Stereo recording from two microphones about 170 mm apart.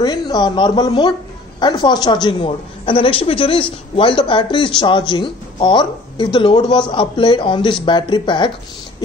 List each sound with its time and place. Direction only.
0.0 s a woman's voice: 25° left (ahead or behind)